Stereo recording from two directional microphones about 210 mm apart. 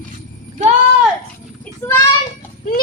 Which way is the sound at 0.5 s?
35° right (ahead or behind).